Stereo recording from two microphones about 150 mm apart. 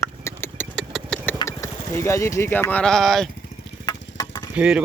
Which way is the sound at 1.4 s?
20° left (ahead or behind).